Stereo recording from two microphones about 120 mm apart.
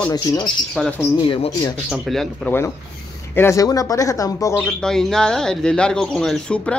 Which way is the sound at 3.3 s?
25° left (ahead or behind).